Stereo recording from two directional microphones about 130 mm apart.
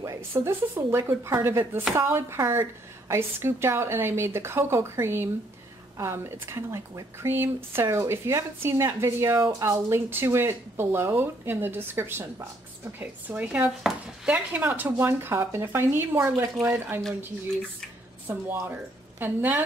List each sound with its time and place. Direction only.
0.4 s speech: 20° right (ahead or behind)
18.2 s a woman's voice: 15° right (ahead or behind)